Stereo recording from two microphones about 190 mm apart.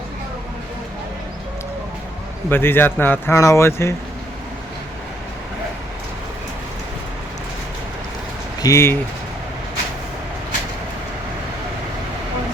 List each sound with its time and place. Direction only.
2.5 s speech: 10° left (ahead or behind)
8.6 s speech: 15° left (ahead or behind)